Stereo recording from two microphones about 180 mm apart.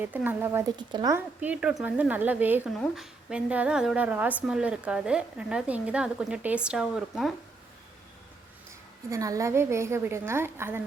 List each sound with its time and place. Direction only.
0.0 s a woman's voice: 10° right (ahead or behind)
0.8 s speech: 20° right (ahead or behind)
1.4 s a woman's voice: 5° right (ahead or behind)
9.0 s a woman's voice: 15° right (ahead or behind)